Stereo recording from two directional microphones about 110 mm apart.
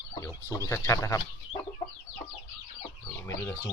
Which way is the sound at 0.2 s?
30° left (ahead or behind).